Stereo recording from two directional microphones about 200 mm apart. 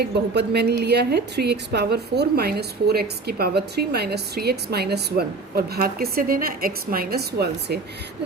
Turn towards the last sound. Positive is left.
turn(degrees=-55)  # may be behind; listen again after turning